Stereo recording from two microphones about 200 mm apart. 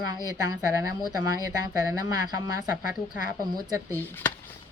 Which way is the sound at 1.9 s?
20° right (ahead or behind).